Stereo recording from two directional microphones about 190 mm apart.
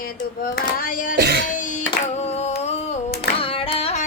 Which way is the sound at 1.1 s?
60° right (ahead or behind).